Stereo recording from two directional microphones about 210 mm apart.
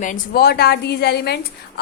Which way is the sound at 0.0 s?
45° left (ahead or behind).